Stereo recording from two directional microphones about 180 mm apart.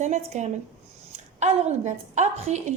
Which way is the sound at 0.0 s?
40° right (ahead or behind).